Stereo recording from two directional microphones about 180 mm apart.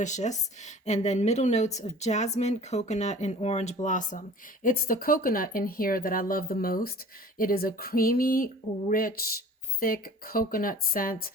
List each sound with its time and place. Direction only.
0.0 s a woman's voice: 40° left (ahead or behind)